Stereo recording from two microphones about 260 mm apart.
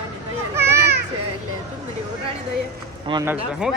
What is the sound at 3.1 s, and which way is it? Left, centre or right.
Speech, centre.